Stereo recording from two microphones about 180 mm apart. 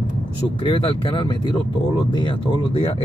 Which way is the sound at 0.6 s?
30° left (ahead or behind).